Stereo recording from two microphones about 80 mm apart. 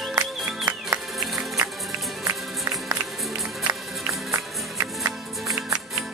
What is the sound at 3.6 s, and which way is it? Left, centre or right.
Music, right.